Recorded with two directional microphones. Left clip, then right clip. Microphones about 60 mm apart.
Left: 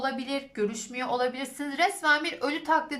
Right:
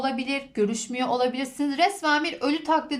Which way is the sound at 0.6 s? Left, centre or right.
Right.